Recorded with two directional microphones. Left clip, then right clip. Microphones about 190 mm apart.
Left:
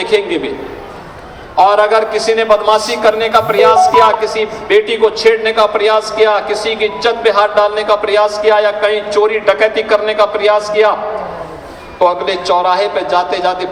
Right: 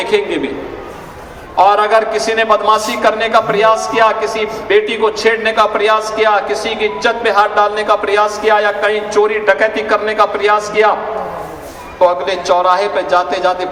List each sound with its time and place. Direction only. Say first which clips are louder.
0.0 s a man's voice: left 1 dB; 15° right (ahead or behind)
1.5 s a man's voice: left 1 dB; 15° right (ahead or behind)
12.0 s a man's voice: even; 15° right (ahead or behind)